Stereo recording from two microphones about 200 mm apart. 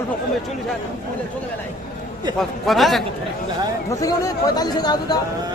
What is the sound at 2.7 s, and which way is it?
Speech, centre (ahead or behind).